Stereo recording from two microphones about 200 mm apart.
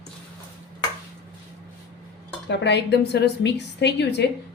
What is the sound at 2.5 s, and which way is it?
A woman's voice, 60° left (ahead or behind).